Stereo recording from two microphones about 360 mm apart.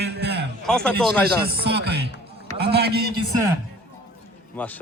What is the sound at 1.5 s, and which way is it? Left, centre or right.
Music, right.